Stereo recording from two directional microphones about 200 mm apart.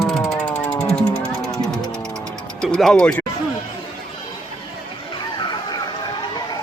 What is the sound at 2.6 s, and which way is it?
Speech, centre (ahead or behind).